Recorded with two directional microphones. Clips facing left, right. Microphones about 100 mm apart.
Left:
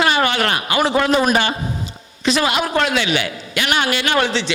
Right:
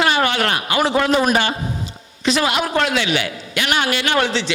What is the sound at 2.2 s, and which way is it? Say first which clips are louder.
A man's voice: even; 20° left (ahead or behind).